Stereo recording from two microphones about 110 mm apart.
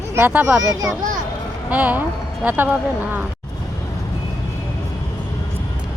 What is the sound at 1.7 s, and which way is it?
Speech, 15° right (ahead or behind).